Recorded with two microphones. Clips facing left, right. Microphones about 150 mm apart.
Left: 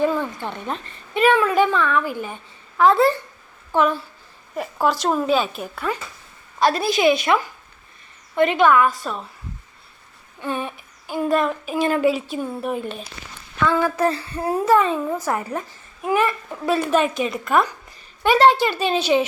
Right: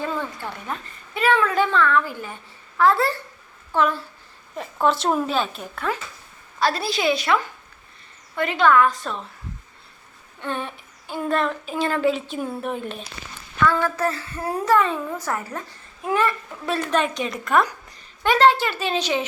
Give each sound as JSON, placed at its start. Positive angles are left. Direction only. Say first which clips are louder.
{"t": 0.0, "sound": "a woman's voice", "louder": "left 6 dB", "side_deg": 15}
{"t": 4.5, "sound": "a woman's voice", "louder": "even", "side_deg": 5}
{"t": 6.6, "sound": "a woman's voice", "louder": "left 4 dB", "side_deg": 15}
{"t": 8.4, "sound": "a woman's voice", "louder": "left 2 dB", "side_deg": 20}
{"t": 10.4, "sound": "a woman's voice", "louder": "left 2 dB", "side_deg": 10}
{"t": 16.6, "sound": "a woman's voice", "louder": "left 4 dB", "side_deg": 10}
{"t": 18.2, "sound": "a woman's voice", "louder": "left 2 dB", "side_deg": 15}